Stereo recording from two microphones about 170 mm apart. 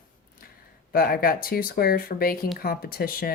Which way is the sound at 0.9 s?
60° left (ahead or behind).